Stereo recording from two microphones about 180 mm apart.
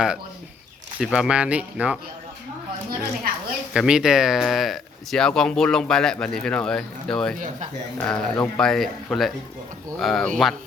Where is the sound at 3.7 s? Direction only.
5° right (ahead or behind).